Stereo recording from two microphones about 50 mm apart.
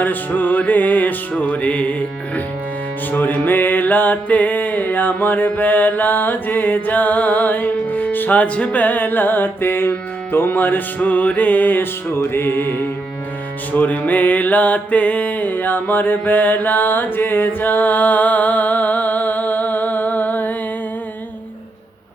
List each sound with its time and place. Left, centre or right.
0.0 s music: left
3.1 s music: left
13.7 s music: left